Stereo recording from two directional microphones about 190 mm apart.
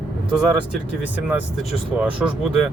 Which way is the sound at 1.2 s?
10° right (ahead or behind).